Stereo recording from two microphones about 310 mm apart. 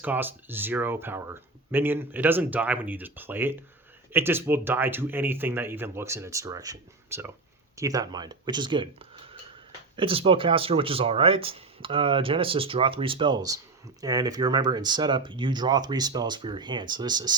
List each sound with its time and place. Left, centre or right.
0.0 s speech: centre